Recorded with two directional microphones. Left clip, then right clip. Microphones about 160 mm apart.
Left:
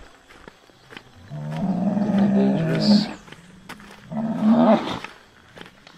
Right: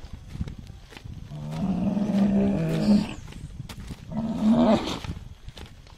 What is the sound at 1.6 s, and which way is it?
Roaring cats, 30° right (ahead or behind).